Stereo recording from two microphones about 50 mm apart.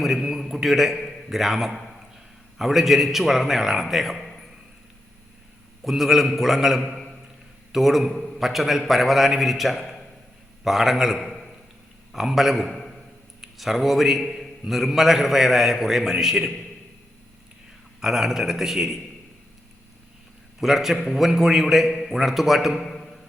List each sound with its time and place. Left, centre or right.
0.0 s a man's voice: centre
5.8 s a man's voice: centre
18.0 s a man's voice: centre
20.6 s a man's voice: centre